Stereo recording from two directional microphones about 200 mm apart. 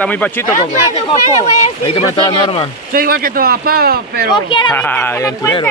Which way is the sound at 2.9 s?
45° right (ahead or behind).